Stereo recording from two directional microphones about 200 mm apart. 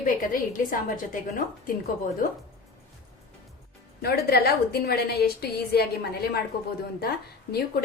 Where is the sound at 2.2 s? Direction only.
45° left (ahead or behind).